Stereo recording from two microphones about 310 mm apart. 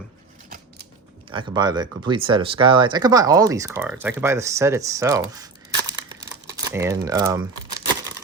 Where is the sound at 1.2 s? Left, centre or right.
Centre.